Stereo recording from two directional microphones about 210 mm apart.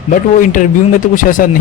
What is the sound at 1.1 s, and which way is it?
Speech, 40° left (ahead or behind).